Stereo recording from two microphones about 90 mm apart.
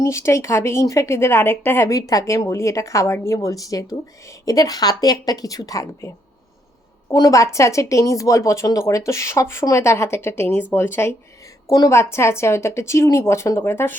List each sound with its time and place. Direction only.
0.0 s a woman's voice: 30° left (ahead or behind)
1.9 s a woman's voice: 40° left (ahead or behind)
7.1 s a woman's voice: 35° left (ahead or behind)